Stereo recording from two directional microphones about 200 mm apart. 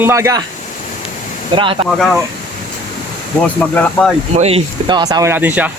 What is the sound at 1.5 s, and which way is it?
Speech, 25° right (ahead or behind).